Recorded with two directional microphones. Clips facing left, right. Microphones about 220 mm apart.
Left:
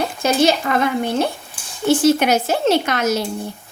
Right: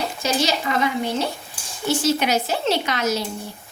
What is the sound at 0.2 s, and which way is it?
A woman's voice, 55° left (ahead or behind).